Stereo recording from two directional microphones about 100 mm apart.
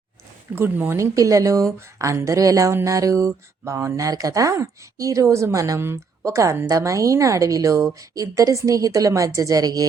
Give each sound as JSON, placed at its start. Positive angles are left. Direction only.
{"t": 0.5, "sound": "speech", "side_deg": -20}